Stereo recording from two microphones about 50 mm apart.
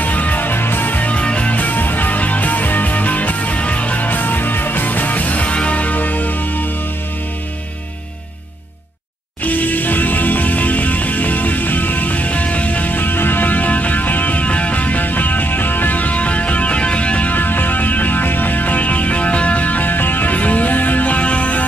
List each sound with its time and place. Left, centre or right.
0.0 s music: left
9.4 s music: left